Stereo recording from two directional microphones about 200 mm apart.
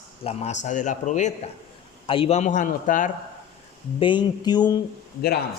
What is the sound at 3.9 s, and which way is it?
Speech, 25° left (ahead or behind).